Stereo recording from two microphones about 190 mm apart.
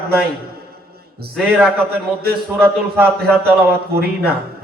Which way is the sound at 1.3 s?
Centre (ahead or behind).